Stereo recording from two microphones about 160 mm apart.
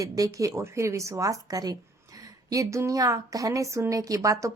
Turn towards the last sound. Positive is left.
turn(degrees=-20)  # may be behind; listen again after turning